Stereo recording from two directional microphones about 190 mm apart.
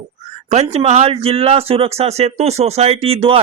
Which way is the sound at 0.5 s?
35° right (ahead or behind).